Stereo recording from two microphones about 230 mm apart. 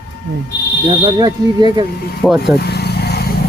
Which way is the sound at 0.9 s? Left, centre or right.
Right.